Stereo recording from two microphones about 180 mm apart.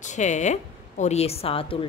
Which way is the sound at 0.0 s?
40° left (ahead or behind).